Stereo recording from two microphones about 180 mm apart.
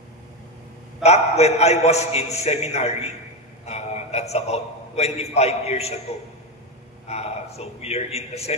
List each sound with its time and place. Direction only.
1.0 s a man's voice: 35° left (ahead or behind)